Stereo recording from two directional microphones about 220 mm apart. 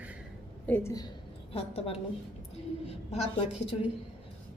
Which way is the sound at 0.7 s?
10° left (ahead or behind).